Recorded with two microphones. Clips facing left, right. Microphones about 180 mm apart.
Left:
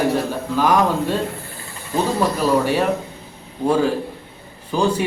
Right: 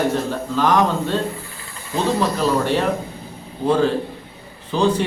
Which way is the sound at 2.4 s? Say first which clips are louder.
Left 1 dB; 10° left (ahead or behind).